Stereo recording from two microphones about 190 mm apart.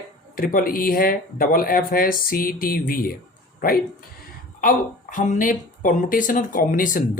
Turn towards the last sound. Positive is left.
turn(degrees=45)  # may be behind; listen again after turning